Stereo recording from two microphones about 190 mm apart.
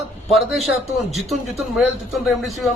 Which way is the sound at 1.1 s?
Centre (ahead or behind).